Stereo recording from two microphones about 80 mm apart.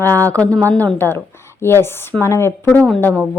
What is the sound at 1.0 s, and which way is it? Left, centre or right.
A woman's voice, left.